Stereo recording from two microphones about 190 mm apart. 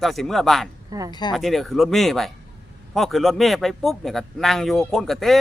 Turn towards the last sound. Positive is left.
turn(degrees=0)  # may be behind; listen again after turning